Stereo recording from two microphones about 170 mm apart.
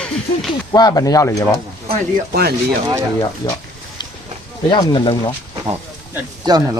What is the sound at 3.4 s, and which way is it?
Speech, 20° left (ahead or behind).